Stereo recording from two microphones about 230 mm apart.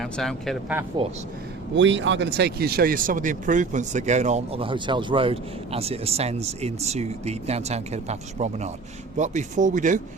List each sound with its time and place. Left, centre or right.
0.0 s speech: centre
1.7 s speech: right